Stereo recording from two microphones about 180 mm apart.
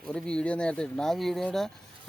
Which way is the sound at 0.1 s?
5° left (ahead or behind).